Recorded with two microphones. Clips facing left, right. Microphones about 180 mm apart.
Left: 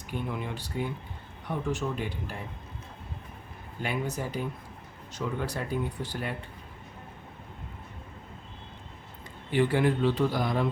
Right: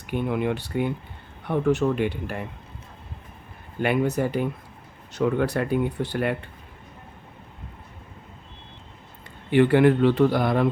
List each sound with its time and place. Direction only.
0.1 s speech: 65° right (ahead or behind)
3.8 s speech: 65° right (ahead or behind)
9.5 s speech: 65° right (ahead or behind)